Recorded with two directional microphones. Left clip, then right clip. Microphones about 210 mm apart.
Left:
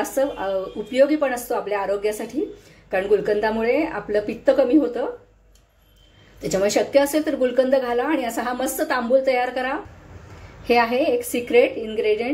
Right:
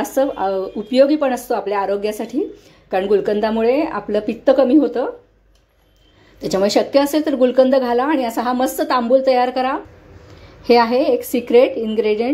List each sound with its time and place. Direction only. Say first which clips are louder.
0.0 s a woman's voice: right 4 dB; 35° right (ahead or behind)
6.4 s a woman's voice: right 4 dB; 30° right (ahead or behind)